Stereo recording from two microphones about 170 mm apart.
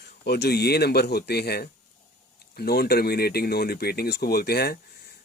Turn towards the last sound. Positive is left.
turn(degrees=65)  # may be behind; listen again after turning